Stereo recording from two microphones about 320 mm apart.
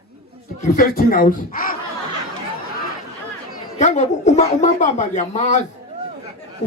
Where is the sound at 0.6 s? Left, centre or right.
Left.